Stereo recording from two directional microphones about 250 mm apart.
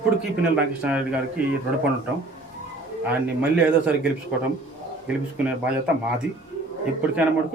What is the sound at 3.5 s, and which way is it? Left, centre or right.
Speech, centre.